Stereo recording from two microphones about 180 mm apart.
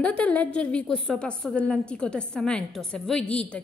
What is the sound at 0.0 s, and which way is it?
A woman's voice, 10° left (ahead or behind).